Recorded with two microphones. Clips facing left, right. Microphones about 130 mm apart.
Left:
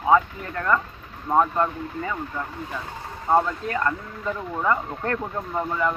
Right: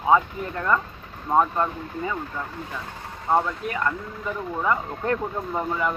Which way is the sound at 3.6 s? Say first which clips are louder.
Left 1 dB; 5° right (ahead or behind).